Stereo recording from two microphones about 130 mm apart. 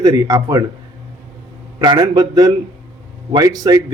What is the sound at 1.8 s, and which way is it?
A man's voice, 35° right (ahead or behind).